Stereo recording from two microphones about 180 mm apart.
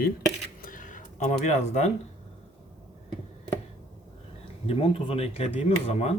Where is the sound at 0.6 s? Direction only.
50° left (ahead or behind).